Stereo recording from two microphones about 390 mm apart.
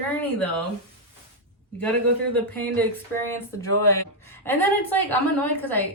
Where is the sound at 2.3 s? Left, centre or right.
Centre.